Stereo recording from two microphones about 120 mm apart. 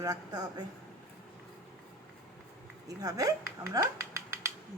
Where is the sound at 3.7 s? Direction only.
25° right (ahead or behind).